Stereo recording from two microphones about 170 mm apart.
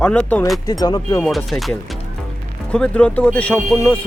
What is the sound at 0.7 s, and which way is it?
Speech, 25° left (ahead or behind).